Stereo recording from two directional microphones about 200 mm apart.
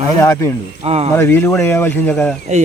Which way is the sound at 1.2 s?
10° left (ahead or behind).